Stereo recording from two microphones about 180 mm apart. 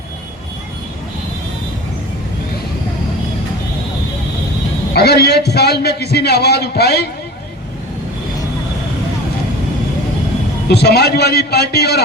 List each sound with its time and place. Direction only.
4.9 s a man's voice: 65° left (ahead or behind)
10.7 s a man's voice: 65° left (ahead or behind)